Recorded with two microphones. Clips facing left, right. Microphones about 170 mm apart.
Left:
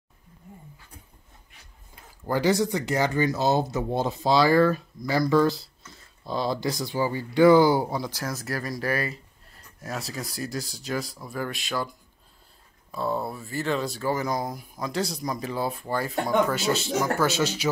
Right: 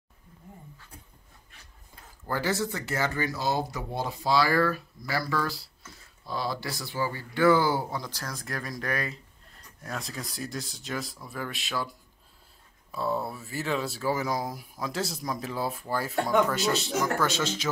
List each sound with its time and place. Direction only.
2.2 s speech: 15° left (ahead or behind); by 11.9 s centre (ahead or behind)
12.9 s speech: 5° right (ahead or behind)